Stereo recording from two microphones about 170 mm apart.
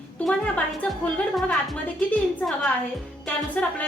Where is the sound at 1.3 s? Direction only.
5° left (ahead or behind).